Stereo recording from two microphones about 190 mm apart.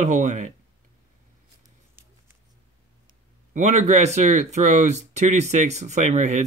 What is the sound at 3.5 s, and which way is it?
Speech, 40° right (ahead or behind).